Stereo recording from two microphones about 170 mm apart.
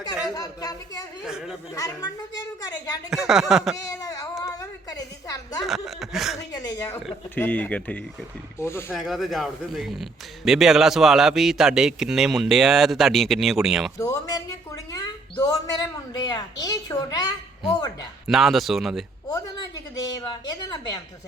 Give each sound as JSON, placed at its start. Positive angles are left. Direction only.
{"t": 0.3, "sound": "a woman's voice", "side_deg": 20}
{"t": 1.2, "sound": "a man's voice", "side_deg": -5}
{"t": 1.7, "sound": "a woman's voice", "side_deg": 20}
{"t": 3.1, "sound": "a man's voice", "side_deg": -5}
{"t": 4.0, "sound": "child singing", "side_deg": 20}
{"t": 4.4, "sound": "a sound", "side_deg": 20}
{"t": 5.6, "sound": "a man's voice", "side_deg": 0}
{"t": 6.5, "sound": "speech", "side_deg": 20}
{"t": 9.0, "sound": "a man's voice", "side_deg": 0}
{"t": 14.0, "sound": "a woman's voice", "side_deg": 20}
{"t": 14.9, "sound": "a sound", "side_deg": 20}
{"t": 16.2, "sound": "a woman's voice", "side_deg": 25}
{"t": 18.3, "sound": "a man's voice", "side_deg": 0}
{"t": 19.3, "sound": "a woman's voice", "side_deg": 20}